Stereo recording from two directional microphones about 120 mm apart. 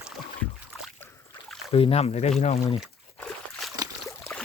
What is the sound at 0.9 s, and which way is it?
Boat, 20° left (ahead or behind).